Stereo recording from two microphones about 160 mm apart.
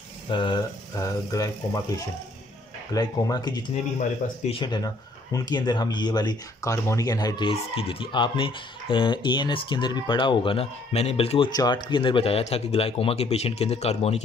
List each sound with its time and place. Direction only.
0.3 s speech: 30° left (ahead or behind)
2.9 s speech: 25° left (ahead or behind); by 14.2 s 40° left (ahead or behind)